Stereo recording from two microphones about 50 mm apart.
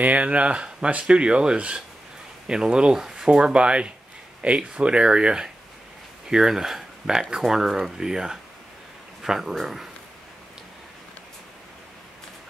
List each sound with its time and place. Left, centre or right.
0.0 s speech: right; by 9.8 s centre